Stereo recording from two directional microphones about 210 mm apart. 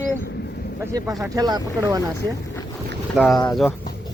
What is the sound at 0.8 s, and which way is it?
Speech, 15° right (ahead or behind).